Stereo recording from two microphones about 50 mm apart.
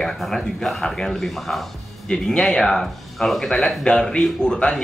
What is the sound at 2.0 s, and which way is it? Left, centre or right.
Speech, centre.